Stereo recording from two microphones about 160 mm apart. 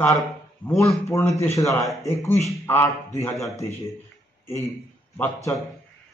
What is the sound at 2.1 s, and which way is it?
A man's voice, 15° left (ahead or behind).